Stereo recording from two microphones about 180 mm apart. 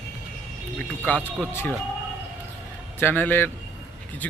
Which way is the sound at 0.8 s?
10° left (ahead or behind).